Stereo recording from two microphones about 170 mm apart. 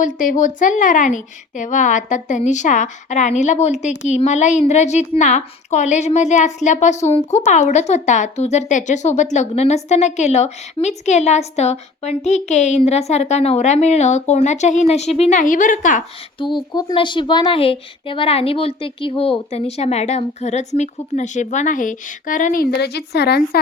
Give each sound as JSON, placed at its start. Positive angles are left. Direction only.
{"t": 0.0, "sound": "a woman's voice", "side_deg": 50}
{"t": 16.4, "sound": "speech", "side_deg": 30}